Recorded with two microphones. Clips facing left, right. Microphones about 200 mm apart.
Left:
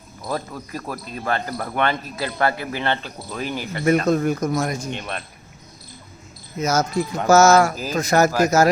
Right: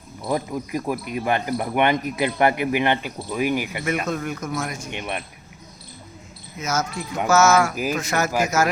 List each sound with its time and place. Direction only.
0.3 s speech: 15° right (ahead or behind)
4.0 s speech: 35° left (ahead or behind)
4.9 s speech: 15° right (ahead or behind)
6.6 s speech: 35° left (ahead or behind)